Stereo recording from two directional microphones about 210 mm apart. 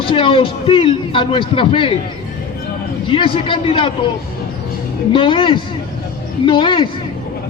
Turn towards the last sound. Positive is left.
turn(degrees=20)  # may be behind; listen again after turning